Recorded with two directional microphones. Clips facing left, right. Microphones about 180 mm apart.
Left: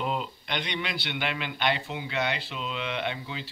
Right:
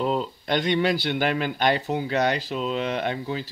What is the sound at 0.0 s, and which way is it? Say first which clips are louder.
Speech: right 6 dB; 35° right (ahead or behind).